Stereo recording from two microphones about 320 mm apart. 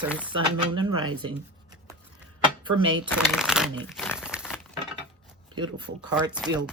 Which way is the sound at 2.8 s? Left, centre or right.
Right.